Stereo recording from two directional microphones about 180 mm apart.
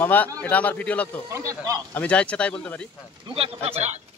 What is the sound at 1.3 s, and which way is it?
Speech, 20° right (ahead or behind).